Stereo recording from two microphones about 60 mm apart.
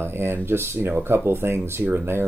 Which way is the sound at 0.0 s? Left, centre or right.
Right.